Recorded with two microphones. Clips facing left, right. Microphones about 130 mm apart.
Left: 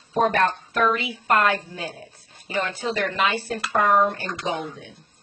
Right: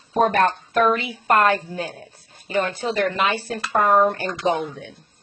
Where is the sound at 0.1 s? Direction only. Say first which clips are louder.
Right 2 dB; 45° right (ahead or behind).